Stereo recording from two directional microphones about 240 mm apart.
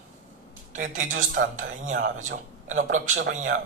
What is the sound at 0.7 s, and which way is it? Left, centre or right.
Speech, right.